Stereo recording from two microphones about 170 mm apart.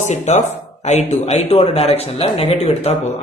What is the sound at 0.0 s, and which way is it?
Speech, 45° left (ahead or behind).